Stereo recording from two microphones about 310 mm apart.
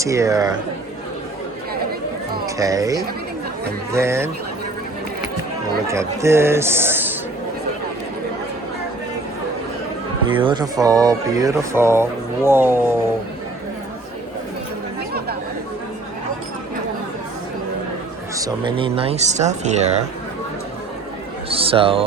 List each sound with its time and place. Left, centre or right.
0.0 s a man's voice: centre
2.6 s a man's voice: centre
5.9 s a man's voice: centre
10.2 s a man's voice: centre
18.3 s speech: centre
21.5 s a sound: centre